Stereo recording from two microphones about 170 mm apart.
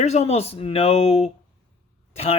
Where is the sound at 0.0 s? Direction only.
40° left (ahead or behind).